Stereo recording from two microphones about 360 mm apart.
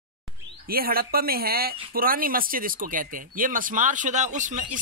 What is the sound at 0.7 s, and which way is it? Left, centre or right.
A man's voice, right.